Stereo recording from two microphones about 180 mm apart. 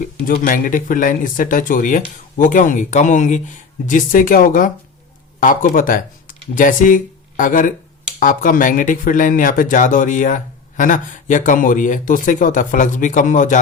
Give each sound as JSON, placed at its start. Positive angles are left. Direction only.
{"t": 0.3, "sound": "speech", "side_deg": 50}